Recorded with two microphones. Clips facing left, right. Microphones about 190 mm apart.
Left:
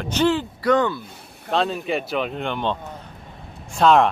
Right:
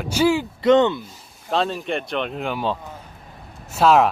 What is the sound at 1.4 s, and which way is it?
Speech, centre (ahead or behind).